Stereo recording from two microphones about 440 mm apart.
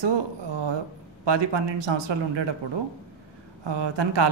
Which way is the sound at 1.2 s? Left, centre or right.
Right.